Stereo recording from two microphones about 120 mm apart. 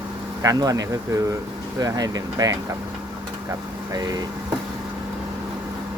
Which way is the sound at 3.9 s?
30° right (ahead or behind).